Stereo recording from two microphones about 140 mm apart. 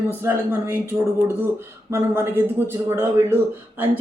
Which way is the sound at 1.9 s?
15° right (ahead or behind).